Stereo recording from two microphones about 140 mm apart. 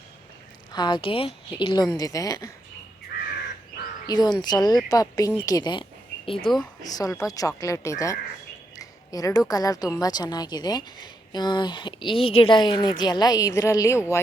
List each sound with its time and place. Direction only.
0.7 s speech: 30° left (ahead or behind)
3.1 s crow: 90° left
4.0 s a woman's voice: 30° left (ahead or behind)
6.8 s speech: 25° left (ahead or behind)
8.8 s a sound: 25° left (ahead or behind)
9.5 s speech: 25° left (ahead or behind)